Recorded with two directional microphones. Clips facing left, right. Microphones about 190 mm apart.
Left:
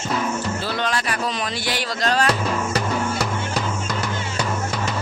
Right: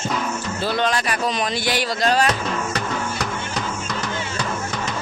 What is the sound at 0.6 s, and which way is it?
Speech, 20° right (ahead or behind).